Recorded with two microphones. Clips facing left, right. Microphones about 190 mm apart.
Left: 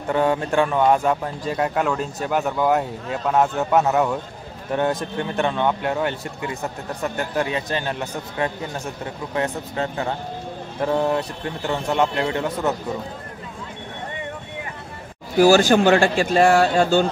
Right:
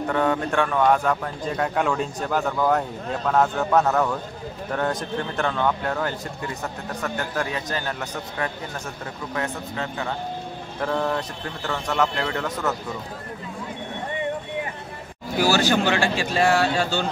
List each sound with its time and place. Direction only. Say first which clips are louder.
0.1 s a man's voice: left 4 dB; 25° left (ahead or behind)
1.6 s a man's voice: left 1 dB; 5° left (ahead or behind); by 8.5 s 25° left (ahead or behind)
9.8 s speech: left 5 dB; 35° left (ahead or behind)
10.8 s a man's voice: left 4 dB; 20° left (ahead or behind)
15.4 s speech: left 6 dB; 45° left (ahead or behind)